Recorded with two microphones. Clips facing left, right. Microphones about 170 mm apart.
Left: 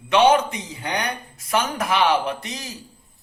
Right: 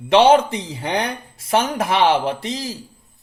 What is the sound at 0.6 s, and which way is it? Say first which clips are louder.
Speech: right 4 dB; 90° right.